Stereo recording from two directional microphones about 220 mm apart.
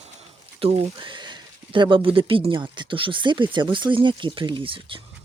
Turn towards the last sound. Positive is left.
turn(degrees=-25)  # may be behind; listen again after turning